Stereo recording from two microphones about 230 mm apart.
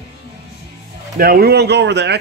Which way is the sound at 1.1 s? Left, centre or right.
Right.